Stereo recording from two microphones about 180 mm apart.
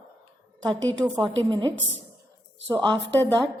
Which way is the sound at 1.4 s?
25° right (ahead or behind).